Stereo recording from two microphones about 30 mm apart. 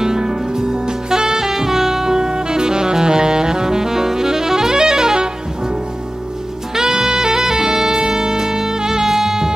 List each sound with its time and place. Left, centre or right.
0.0 s saxophone: right
6.7 s saxophone: centre